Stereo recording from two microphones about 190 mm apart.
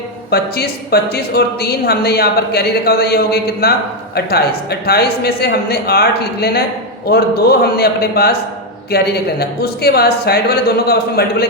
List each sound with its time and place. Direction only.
0.3 s a woman's voice: 55° left (ahead or behind)